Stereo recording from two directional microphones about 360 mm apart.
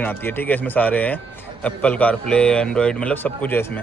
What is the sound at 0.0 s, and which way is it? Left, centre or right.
Speech, centre.